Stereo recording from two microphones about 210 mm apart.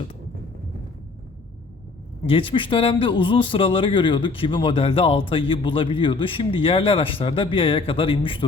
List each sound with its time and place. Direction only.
2.2 s speech: 25° left (ahead or behind)